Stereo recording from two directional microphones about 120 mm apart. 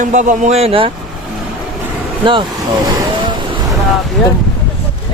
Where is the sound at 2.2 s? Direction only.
45° right (ahead or behind).